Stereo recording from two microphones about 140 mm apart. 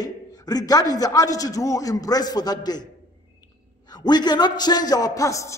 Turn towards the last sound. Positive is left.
turn(degrees=20)  # may be behind; listen again after turning